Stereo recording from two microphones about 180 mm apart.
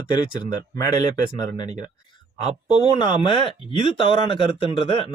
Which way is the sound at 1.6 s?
40° right (ahead or behind).